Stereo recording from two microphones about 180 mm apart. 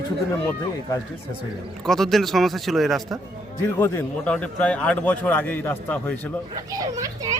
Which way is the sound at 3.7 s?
15° left (ahead or behind).